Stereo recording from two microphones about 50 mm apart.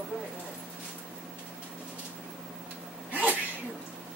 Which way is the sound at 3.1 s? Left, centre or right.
Right.